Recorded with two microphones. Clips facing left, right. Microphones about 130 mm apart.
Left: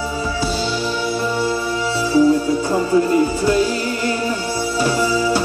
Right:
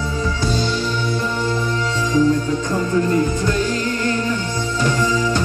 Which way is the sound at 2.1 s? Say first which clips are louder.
Left 3 dB; 10° left (ahead or behind).